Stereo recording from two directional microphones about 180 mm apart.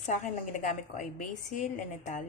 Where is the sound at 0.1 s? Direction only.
45° left (ahead or behind).